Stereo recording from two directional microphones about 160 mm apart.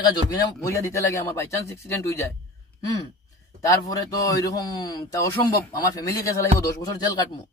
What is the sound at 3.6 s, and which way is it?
A man's voice, 20° left (ahead or behind).